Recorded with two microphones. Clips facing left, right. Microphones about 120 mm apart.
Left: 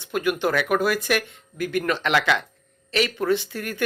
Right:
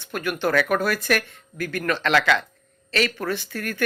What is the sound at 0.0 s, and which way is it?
Speech, 15° left (ahead or behind).